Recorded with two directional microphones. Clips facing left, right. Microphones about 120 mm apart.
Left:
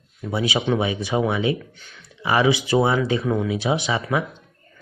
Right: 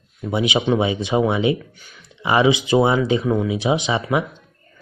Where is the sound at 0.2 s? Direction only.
20° right (ahead or behind).